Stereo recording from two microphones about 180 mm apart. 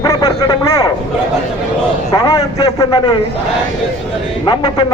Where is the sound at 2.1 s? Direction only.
20° left (ahead or behind).